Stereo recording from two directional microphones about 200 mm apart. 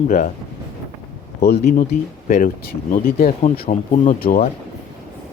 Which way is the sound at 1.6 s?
40° left (ahead or behind).